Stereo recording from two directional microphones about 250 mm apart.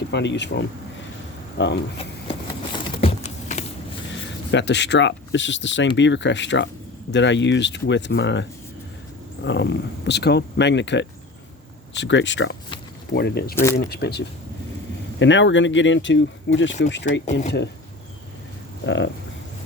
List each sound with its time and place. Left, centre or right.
0.1 s speech: left
2.7 s a sound: left
4.5 s speech: left
18.9 s speech: left